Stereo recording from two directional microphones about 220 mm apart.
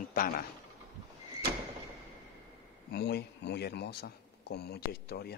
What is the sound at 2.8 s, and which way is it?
A man's voice, 50° left (ahead or behind).